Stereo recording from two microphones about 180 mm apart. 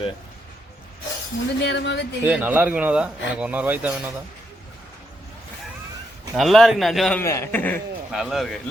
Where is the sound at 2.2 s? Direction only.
10° right (ahead or behind).